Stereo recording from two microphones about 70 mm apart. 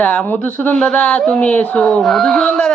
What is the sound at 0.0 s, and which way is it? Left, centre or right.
Speech, left.